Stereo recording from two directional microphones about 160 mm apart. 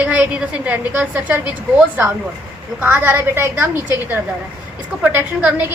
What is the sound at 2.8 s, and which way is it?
A woman's voice, 10° right (ahead or behind).